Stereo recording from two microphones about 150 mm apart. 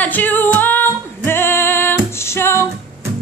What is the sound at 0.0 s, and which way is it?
Music, 10° left (ahead or behind).